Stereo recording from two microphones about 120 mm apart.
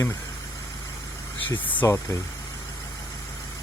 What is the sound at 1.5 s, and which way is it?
Speech, 35° left (ahead or behind).